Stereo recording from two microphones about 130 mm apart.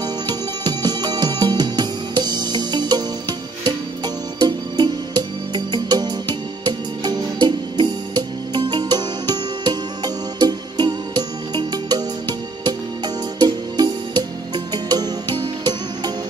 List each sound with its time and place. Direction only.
0.0 s music: 30° right (ahead or behind)